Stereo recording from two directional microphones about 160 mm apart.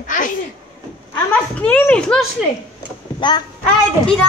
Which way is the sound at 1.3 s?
10° left (ahead or behind).